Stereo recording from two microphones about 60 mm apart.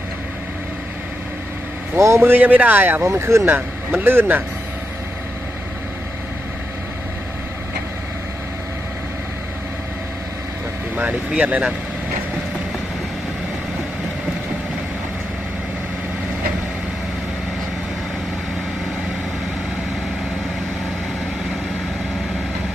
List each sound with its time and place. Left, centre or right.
2.0 s a man's voice: right
2.2 s speech: right
3.0 s speech: right
4.0 s speech: right
11.3 s speech: right